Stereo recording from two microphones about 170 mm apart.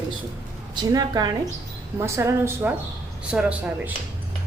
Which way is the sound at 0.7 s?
20° right (ahead or behind).